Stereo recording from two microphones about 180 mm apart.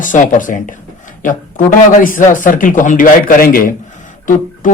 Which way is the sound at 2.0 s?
50° left (ahead or behind).